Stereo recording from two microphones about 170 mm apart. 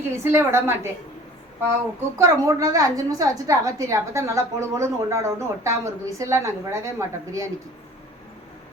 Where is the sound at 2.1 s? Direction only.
15° right (ahead or behind).